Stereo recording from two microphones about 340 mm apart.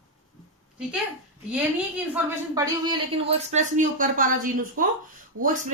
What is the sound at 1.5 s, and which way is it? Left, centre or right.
A woman's voice, centre.